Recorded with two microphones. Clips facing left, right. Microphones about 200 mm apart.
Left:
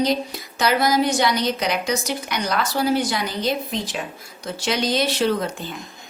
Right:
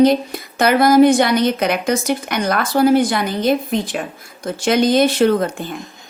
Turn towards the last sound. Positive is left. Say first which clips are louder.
# right 6 dB
turn(degrees=-50)  # may be behind; listen again after turning